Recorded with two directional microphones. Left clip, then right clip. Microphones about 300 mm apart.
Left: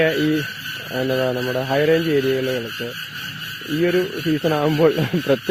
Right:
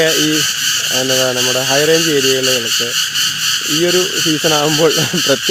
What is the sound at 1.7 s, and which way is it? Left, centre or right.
Speech, centre.